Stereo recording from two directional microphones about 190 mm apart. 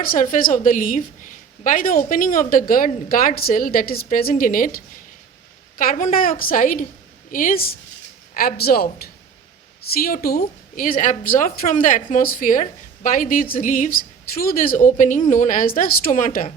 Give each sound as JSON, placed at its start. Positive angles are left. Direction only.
{"t": 0.0, "sound": "a woman's voice", "side_deg": 45}